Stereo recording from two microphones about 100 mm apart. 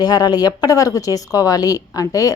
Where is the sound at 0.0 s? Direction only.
40° left (ahead or behind).